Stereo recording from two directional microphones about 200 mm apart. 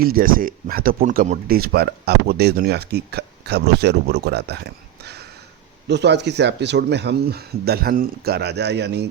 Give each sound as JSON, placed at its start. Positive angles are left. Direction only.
{"t": 0.0, "sound": "speech", "side_deg": -45}